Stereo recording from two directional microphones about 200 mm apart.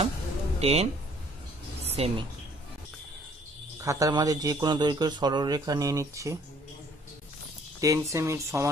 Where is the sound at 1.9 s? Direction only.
30° right (ahead or behind).